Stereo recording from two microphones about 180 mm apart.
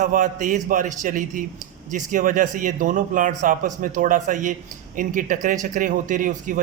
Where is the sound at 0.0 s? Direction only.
45° right (ahead or behind).